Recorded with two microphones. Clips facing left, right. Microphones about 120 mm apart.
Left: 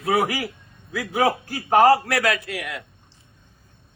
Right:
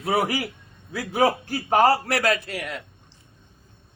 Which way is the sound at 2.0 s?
30° right (ahead or behind).